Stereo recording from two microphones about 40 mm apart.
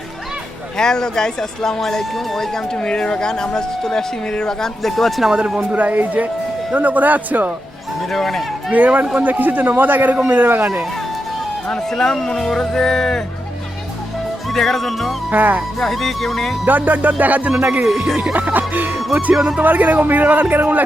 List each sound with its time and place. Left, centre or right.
0.8 s speech: centre
2.7 s speech: left; by 5.2 s centre
5.7 s a man's voice: right
8.1 s speech: centre
8.7 s a man's voice: right
11.7 s speech: centre
14.5 s speech: centre
15.3 s a man's voice: right
15.8 s speech: centre
16.6 s a man's voice: right
19.3 s music: centre
19.6 s a man's voice: right